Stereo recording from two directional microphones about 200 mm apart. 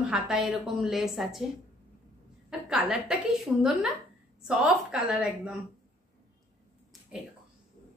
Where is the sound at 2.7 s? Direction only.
5° right (ahead or behind).